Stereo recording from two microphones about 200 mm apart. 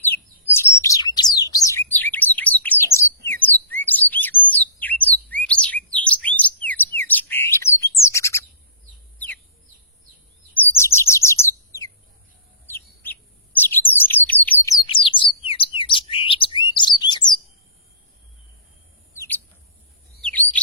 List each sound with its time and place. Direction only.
0.1 s bird: 10° left (ahead or behind)
10.5 s chirp: 10° left (ahead or behind)
14.6 s bird: 20° left (ahead or behind)
17.0 s chirp: 20° left (ahead or behind)
20.2 s chirp: 10° left (ahead or behind)